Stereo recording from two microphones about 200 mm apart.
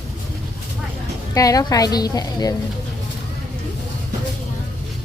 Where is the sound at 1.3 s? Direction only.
15° left (ahead or behind).